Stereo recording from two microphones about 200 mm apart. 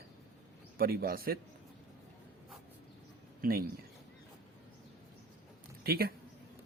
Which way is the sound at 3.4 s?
45° right (ahead or behind).